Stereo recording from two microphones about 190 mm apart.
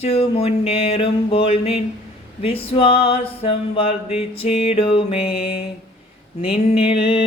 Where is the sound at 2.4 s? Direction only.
30° left (ahead or behind).